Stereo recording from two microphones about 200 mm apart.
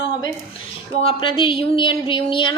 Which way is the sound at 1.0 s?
25° left (ahead or behind).